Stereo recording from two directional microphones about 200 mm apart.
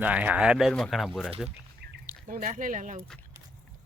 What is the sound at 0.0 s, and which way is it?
Speech, 5° right (ahead or behind).